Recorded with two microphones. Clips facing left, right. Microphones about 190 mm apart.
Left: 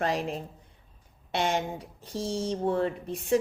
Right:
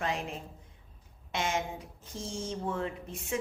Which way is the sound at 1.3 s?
35° left (ahead or behind).